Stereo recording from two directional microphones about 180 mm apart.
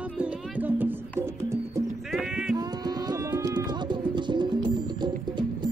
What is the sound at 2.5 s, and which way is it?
Music, 20° right (ahead or behind).